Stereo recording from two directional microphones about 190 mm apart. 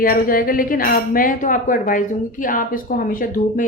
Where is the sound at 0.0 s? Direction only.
50° left (ahead or behind).